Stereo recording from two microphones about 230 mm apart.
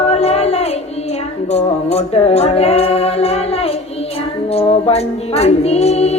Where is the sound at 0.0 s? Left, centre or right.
Left.